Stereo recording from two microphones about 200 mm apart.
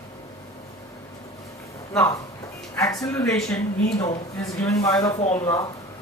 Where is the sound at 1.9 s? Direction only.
15° left (ahead or behind).